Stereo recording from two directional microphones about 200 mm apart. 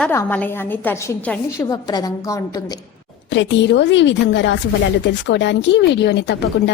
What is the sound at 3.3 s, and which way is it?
Speech, 65° left (ahead or behind).